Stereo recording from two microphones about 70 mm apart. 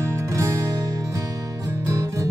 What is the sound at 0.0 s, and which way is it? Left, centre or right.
Music, right.